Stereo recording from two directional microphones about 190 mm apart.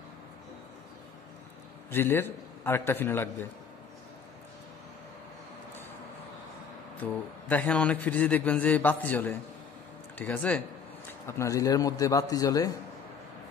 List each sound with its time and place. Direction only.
1.9 s a man's voice: 10° left (ahead or behind)
7.0 s a man's voice: 10° left (ahead or behind)